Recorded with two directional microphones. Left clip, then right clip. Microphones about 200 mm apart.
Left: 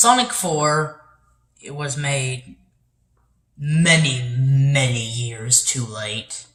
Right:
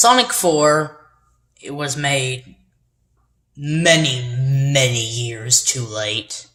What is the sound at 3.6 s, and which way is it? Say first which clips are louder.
Speech: right 3 dB; 40° right (ahead or behind).